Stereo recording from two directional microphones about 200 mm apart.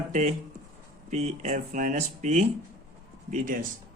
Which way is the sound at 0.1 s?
35° right (ahead or behind).